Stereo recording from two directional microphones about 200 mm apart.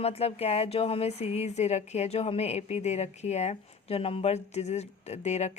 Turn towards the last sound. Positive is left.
turn(degrees=35)  # may be behind; listen again after turning